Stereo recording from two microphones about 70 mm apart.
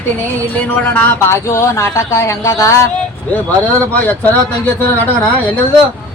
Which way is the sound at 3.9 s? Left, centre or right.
Left.